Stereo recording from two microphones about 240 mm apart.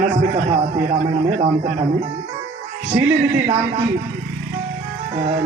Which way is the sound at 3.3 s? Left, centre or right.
Right.